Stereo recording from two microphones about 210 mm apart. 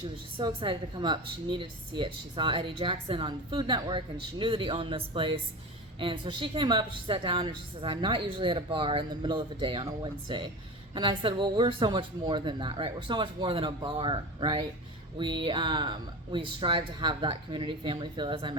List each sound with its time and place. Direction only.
0.0 s a woman's voice: 25° right (ahead or behind)